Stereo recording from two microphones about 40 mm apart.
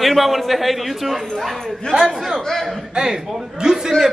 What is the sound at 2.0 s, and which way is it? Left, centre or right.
Speech, centre.